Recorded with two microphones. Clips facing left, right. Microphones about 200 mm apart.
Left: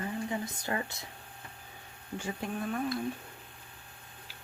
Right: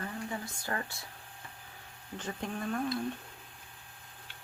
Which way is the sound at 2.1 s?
5° left (ahead or behind).